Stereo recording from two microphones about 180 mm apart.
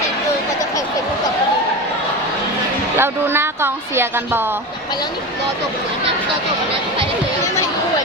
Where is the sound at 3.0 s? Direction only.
15° right (ahead or behind).